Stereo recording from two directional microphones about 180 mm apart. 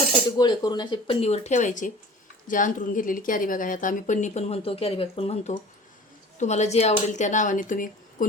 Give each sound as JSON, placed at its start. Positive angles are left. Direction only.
{"t": 0.3, "sound": "speech", "side_deg": 25}